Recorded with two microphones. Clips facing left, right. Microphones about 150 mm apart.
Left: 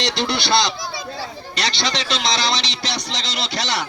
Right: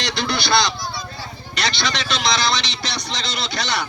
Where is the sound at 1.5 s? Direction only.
35° left (ahead or behind).